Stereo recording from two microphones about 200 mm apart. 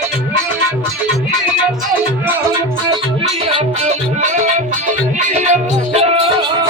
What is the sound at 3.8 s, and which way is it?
Music, 35° right (ahead or behind).